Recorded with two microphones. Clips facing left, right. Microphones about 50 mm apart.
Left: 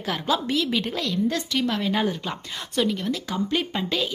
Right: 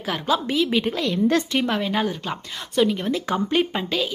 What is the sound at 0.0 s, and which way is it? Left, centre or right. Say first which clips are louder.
A woman's voice: right 2 dB; centre.